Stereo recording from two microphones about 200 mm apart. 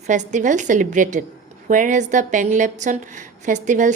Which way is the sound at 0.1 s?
40° right (ahead or behind).